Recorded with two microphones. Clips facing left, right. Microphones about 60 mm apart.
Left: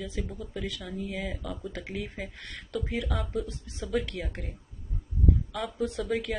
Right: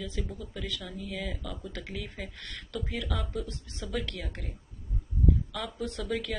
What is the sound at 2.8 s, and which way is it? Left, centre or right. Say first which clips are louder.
Speech: left 3 dB; centre.